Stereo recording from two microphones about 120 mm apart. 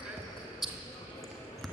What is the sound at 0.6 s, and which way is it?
Basketball bounce, 5° right (ahead or behind).